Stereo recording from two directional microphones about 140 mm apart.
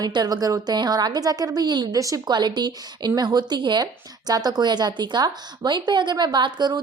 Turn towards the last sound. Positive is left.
turn(degrees=-30)  # may be behind; listen again after turning